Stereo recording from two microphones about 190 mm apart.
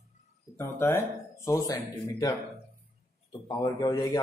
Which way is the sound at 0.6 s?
10° left (ahead or behind).